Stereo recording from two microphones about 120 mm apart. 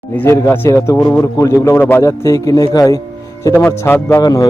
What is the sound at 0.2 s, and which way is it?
A man's voice, 20° left (ahead or behind).